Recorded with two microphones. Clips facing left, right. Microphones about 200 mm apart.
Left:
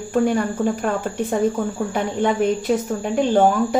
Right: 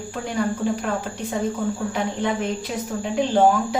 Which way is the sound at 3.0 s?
50° left (ahead or behind).